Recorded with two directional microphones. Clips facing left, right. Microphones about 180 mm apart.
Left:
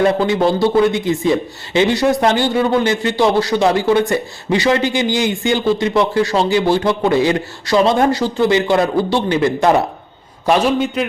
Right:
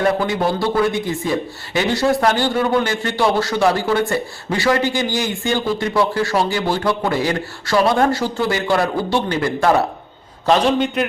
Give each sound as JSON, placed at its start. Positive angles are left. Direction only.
{"t": 0.0, "sound": "a man's voice", "side_deg": 25}
{"t": 10.4, "sound": "a man's voice", "side_deg": 10}